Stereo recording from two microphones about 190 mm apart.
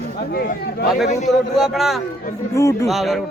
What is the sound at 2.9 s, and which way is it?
Speech, centre (ahead or behind).